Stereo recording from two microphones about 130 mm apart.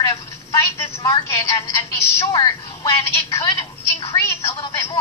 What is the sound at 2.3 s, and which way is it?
A woman's voice, 30° left (ahead or behind).